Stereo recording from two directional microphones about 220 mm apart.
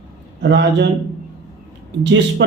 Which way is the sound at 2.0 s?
50° right (ahead or behind).